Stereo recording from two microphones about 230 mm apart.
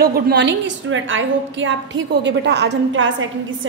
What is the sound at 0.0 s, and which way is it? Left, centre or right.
A woman's voice, right.